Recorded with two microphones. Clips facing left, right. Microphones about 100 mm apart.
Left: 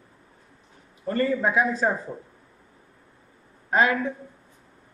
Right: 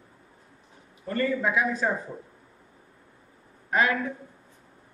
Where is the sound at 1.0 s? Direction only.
30° left (ahead or behind).